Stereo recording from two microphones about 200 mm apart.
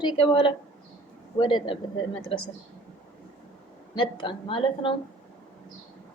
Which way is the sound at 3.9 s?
25° left (ahead or behind).